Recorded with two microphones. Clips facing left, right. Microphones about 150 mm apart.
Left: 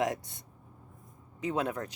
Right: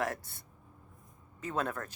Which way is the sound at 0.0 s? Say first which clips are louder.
Left 4 dB; 15° left (ahead or behind).